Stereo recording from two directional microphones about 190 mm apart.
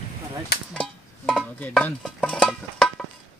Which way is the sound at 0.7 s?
Centre (ahead or behind).